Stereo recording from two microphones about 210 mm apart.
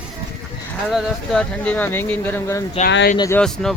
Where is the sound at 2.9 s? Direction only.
55° left (ahead or behind).